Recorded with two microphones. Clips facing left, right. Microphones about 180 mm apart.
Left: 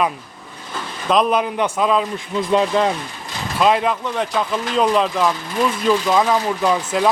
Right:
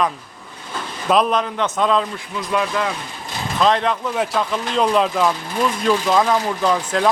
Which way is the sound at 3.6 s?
10° left (ahead or behind).